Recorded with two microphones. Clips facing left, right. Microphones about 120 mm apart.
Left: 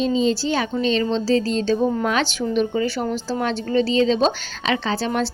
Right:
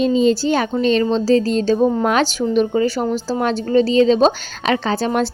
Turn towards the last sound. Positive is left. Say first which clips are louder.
# right 4 dB
turn(degrees=-45)  # may be behind; listen again after turning